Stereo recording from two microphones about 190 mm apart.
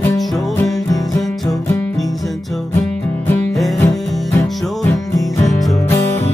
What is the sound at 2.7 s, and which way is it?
Music, 15° left (ahead or behind).